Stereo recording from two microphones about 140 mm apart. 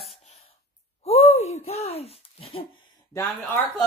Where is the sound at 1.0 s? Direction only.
50° left (ahead or behind).